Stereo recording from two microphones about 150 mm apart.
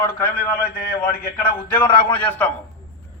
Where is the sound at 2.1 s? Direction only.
10° left (ahead or behind).